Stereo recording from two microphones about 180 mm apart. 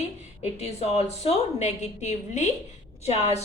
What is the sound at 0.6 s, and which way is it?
Speech, 35° left (ahead or behind).